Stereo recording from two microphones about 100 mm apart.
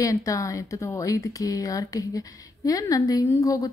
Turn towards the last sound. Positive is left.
turn(degrees=35)  # may be behind; listen again after turning